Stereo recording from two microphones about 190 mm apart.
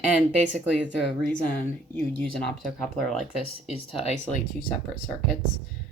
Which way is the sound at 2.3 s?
Centre (ahead or behind).